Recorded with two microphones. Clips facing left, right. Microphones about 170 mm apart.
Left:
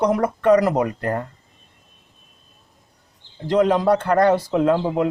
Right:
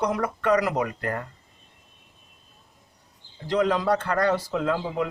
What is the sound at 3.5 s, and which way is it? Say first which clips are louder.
Speech: left 6 dB; 55° left (ahead or behind).